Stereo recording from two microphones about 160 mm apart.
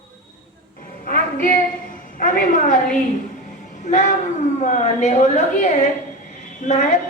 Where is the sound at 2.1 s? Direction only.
55° left (ahead or behind).